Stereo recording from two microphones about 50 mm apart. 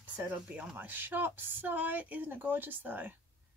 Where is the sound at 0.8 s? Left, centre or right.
Right.